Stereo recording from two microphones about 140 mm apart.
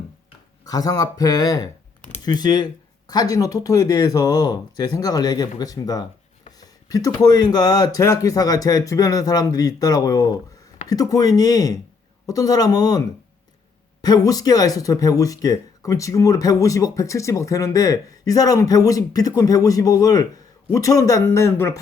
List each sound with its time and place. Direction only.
0.6 s speech: 25° left (ahead or behind)
14.0 s speech: 25° left (ahead or behind)